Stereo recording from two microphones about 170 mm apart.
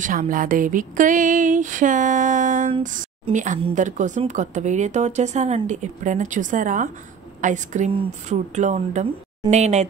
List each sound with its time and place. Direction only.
0.0 s speech: 55° right (ahead or behind)